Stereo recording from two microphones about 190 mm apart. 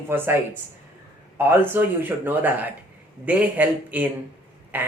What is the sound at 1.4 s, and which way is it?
Speech, 10° right (ahead or behind).